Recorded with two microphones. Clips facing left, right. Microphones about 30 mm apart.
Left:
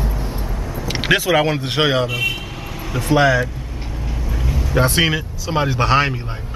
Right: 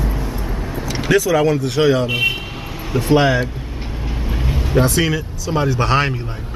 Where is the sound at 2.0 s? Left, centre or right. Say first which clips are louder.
Right 3 dB; right.